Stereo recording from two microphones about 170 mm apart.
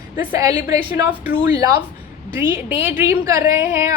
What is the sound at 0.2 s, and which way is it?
Speech, 15° right (ahead or behind).